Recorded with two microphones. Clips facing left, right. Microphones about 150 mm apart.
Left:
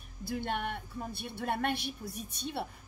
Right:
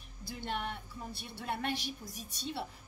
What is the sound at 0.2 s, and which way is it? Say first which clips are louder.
A woman's voice: left 4 dB; 55° left (ahead or behind).